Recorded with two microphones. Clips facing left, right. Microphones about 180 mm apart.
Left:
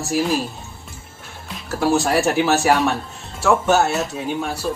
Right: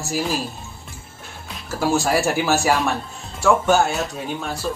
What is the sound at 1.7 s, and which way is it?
Speech, centre (ahead or behind).